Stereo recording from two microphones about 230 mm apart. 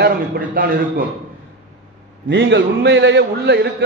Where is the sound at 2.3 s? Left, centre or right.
Right.